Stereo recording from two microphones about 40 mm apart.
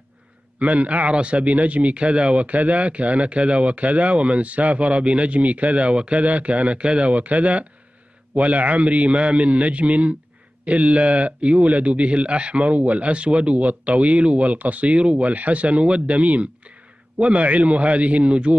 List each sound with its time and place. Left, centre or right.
0.6 s a man's voice: right